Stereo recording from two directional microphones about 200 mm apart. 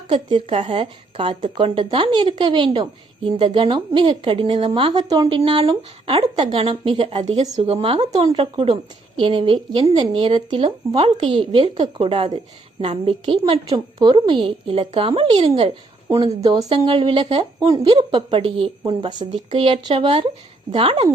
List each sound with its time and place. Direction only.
0.1 s a woman's voice: 25° right (ahead or behind)
16.0 s a woman's voice: 20° right (ahead or behind)